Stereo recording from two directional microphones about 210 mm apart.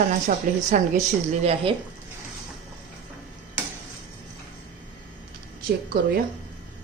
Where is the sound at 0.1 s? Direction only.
35° right (ahead or behind).